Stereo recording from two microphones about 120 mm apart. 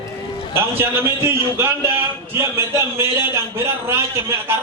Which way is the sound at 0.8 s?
20° right (ahead or behind).